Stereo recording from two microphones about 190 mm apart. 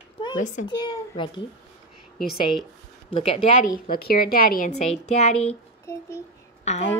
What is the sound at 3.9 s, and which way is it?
Speech, 50° left (ahead or behind).